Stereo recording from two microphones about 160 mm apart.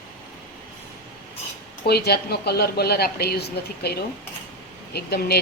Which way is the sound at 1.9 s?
85° left.